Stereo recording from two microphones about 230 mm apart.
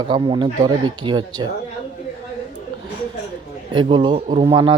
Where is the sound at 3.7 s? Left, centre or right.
Right.